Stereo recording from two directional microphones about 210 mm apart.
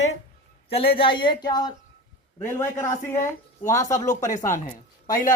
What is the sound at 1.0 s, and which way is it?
A man's voice, 25° left (ahead or behind).